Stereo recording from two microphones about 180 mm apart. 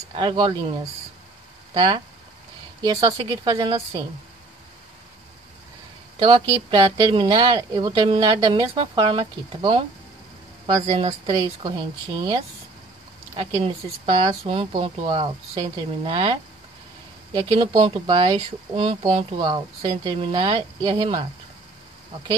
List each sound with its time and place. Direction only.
0.1 s speech: 25° right (ahead or behind)
6.2 s speech: 25° right (ahead or behind)
11.0 s speech: 30° right (ahead or behind)